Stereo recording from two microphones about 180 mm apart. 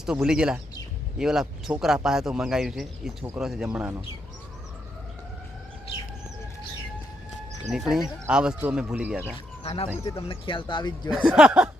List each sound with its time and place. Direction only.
0.0 s speech: 5° right (ahead or behind)
7.7 s speech: centre (ahead or behind)
9.6 s speech: 30° left (ahead or behind)
11.1 s speech: 5° right (ahead or behind)